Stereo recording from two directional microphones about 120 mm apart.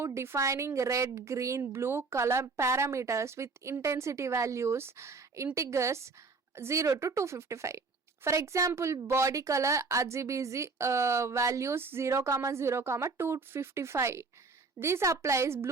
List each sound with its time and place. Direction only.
0.0 s a woman's voice: 20° right (ahead or behind)